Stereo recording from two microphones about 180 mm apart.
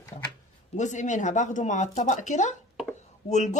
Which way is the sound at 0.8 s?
40° left (ahead or behind).